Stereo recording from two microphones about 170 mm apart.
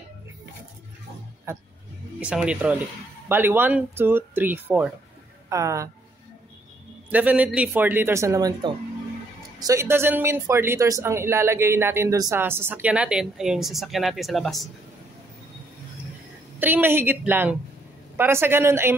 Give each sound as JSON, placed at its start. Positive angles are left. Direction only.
{"t": 2.1, "sound": "speech", "side_deg": -5}
{"t": 7.1, "sound": "speech", "side_deg": -10}
{"t": 16.5, "sound": "speech", "side_deg": -10}